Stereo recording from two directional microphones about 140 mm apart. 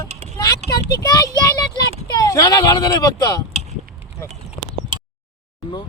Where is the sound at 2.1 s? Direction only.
25° left (ahead or behind).